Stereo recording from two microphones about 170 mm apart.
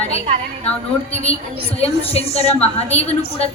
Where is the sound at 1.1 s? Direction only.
35° left (ahead or behind).